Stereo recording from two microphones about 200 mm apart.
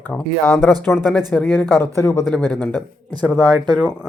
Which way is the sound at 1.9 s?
15° left (ahead or behind).